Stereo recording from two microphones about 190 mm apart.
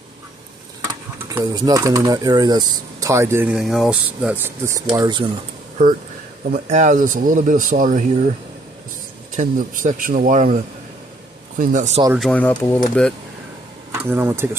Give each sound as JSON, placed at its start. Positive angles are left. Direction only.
{"t": 1.3, "sound": "speech", "side_deg": -20}
{"t": 3.5, "sound": "speech", "side_deg": 0}
{"t": 4.8, "sound": "speech", "side_deg": -20}
{"t": 6.5, "sound": "speech", "side_deg": -45}
{"t": 9.4, "sound": "speech", "side_deg": -40}
{"t": 12.2, "sound": "speech", "side_deg": 5}
{"t": 13.9, "sound": "speech", "side_deg": -15}